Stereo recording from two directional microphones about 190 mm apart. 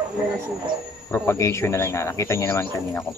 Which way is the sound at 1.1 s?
15° left (ahead or behind).